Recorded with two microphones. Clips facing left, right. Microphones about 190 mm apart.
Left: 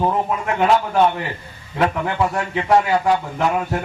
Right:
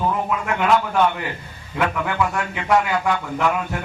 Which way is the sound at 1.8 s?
35° left (ahead or behind).